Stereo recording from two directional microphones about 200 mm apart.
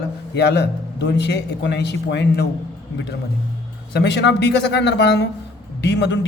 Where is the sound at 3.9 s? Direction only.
60° left (ahead or behind).